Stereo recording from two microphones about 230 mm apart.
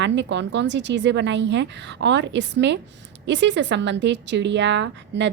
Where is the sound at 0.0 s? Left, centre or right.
Right.